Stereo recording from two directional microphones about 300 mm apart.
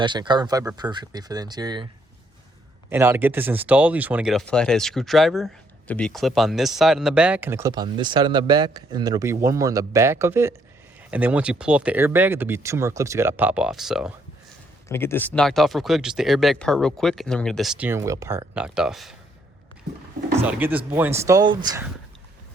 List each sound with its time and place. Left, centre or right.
0.0 s speech: centre
2.9 s speech: centre
20.3 s speech: centre